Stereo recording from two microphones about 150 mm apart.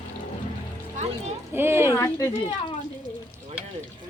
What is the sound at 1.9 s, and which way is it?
Speech, 20° left (ahead or behind).